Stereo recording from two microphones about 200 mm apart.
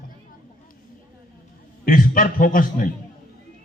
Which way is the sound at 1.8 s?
45° left (ahead or behind).